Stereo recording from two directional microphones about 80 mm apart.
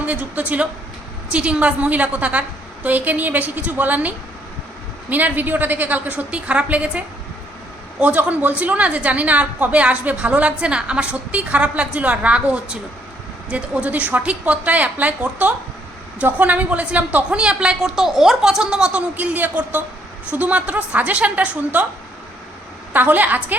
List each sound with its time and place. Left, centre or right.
0.0 s a woman's voice: centre
22.9 s a woman's voice: right